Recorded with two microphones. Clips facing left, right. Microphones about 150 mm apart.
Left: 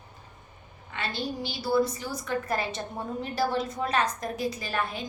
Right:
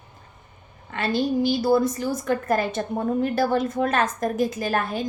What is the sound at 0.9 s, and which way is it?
A woman's voice, 50° right (ahead or behind).